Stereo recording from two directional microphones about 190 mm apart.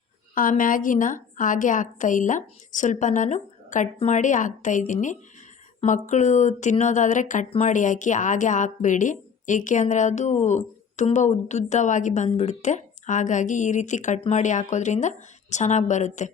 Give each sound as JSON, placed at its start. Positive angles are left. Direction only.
{"t": 0.3, "sound": "a woman's voice", "side_deg": 45}